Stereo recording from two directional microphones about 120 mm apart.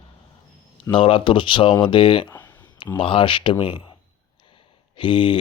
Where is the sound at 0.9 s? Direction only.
45° left (ahead or behind).